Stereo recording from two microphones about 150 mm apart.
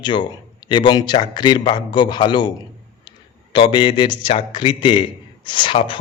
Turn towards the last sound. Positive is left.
turn(degrees=35)  # may be behind; listen again after turning